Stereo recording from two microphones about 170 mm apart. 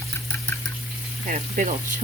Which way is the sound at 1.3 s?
45° right (ahead or behind).